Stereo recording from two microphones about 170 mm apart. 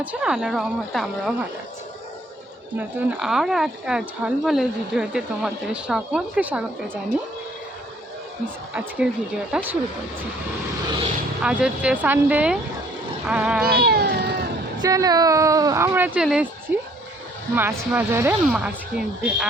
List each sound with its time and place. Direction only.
0.0 s speech: 5° right (ahead or behind)
2.7 s speech: 5° right (ahead or behind)
8.7 s speech: 5° right (ahead or behind)
11.4 s speech: 5° right (ahead or behind)
13.7 s cat: 70° right (ahead or behind)
14.8 s speech: 20° right (ahead or behind); by 19.5 s 5° right (ahead or behind)